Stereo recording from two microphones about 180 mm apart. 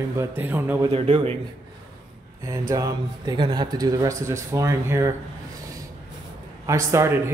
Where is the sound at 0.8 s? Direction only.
30° right (ahead or behind).